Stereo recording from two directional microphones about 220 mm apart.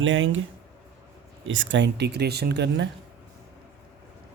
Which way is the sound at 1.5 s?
60° right (ahead or behind).